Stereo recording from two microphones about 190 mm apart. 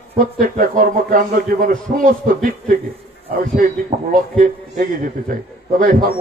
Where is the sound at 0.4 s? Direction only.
45° right (ahead or behind).